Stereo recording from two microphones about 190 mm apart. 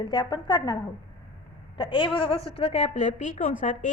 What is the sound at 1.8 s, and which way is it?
A woman's voice, 25° left (ahead or behind).